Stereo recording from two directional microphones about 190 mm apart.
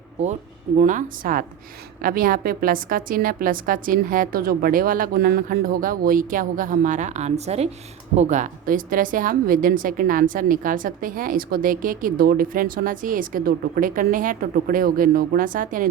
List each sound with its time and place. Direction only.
0.8 s a woman's voice: 40° right (ahead or behind)